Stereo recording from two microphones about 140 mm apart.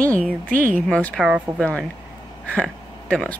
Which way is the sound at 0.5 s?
75° right (ahead or behind).